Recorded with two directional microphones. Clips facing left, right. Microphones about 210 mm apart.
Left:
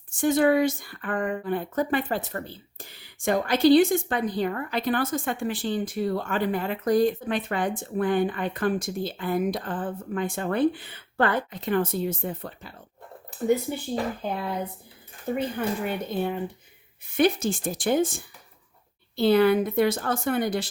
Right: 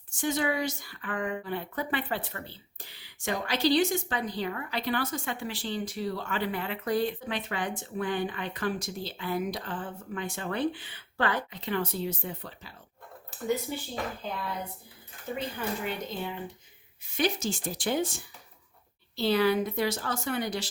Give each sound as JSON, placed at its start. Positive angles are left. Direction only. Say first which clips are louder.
{"t": 0.2, "sound": "a woman's voice", "louder": "left 8 dB", "side_deg": 50}
{"t": 15.5, "sound": "a woman's voice", "louder": "left 5 dB", "side_deg": 50}